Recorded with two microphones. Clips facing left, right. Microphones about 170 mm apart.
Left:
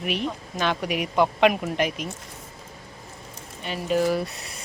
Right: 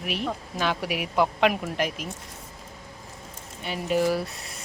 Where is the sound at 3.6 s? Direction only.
10° right (ahead or behind).